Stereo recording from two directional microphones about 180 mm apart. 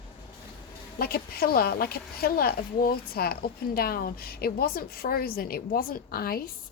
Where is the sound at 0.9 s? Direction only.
55° left (ahead or behind).